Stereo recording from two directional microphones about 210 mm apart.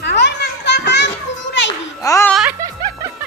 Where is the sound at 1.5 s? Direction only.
60° left (ahead or behind).